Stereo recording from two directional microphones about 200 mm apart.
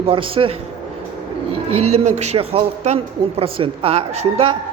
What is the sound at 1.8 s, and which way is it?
A man's voice, 30° right (ahead or behind).